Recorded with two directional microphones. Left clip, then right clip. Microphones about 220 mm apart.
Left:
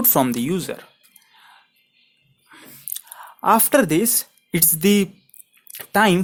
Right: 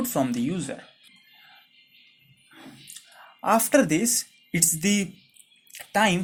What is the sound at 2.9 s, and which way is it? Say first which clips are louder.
Speech: left 13 dB; 40° left (ahead or behind).